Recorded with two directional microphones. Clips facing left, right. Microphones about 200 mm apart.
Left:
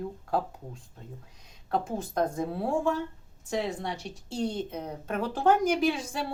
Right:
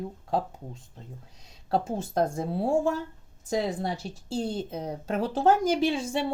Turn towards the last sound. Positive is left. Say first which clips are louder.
# right 1 dB
turn(degrees=-25)  # may be behind; listen again after turning